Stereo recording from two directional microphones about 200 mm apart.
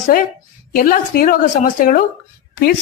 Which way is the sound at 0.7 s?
45° left (ahead or behind).